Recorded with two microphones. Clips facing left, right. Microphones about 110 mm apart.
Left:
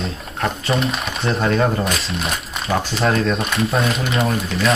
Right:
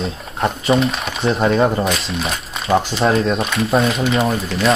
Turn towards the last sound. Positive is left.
turn(degrees=0)  # may be behind; listen again after turning